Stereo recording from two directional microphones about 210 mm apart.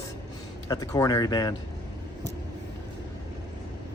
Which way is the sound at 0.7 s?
15° left (ahead or behind).